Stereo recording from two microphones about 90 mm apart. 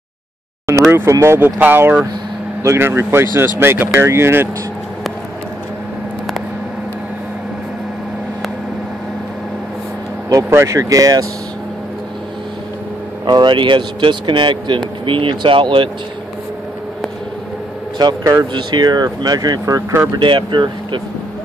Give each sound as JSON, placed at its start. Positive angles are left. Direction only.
{"t": 0.7, "sound": "speech", "side_deg": -30}
{"t": 1.6, "sound": "speech", "side_deg": -20}
{"t": 2.6, "sound": "speech", "side_deg": -30}
{"t": 10.3, "sound": "speech", "side_deg": -35}
{"t": 13.2, "sound": "speech", "side_deg": -55}
{"t": 17.9, "sound": "speech", "side_deg": -50}
{"t": 20.2, "sound": "speech", "side_deg": -65}